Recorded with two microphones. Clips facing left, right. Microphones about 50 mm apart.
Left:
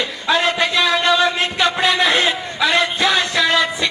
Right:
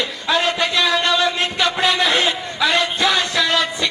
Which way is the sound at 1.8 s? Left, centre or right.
Centre.